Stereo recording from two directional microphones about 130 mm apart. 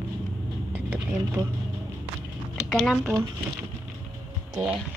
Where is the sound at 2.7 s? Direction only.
Centre (ahead or behind).